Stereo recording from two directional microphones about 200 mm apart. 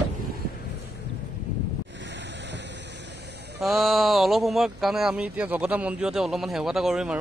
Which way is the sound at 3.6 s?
Centre (ahead or behind).